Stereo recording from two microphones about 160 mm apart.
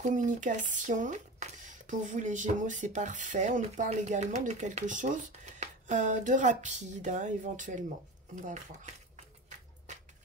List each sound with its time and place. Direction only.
0.0 s speech: 50° right (ahead or behind)